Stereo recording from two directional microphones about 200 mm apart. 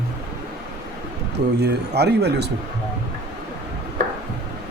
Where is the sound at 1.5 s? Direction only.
55° right (ahead or behind).